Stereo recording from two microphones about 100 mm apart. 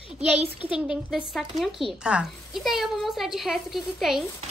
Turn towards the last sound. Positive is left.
turn(degrees=0)  # may be behind; listen again after turning